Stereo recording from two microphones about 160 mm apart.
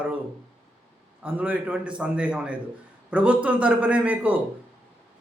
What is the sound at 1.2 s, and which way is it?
Speech, 10° right (ahead or behind).